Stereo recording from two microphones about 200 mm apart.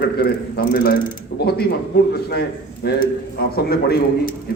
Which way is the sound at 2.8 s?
55° left (ahead or behind).